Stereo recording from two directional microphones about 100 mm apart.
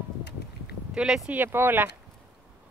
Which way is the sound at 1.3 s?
20° right (ahead or behind).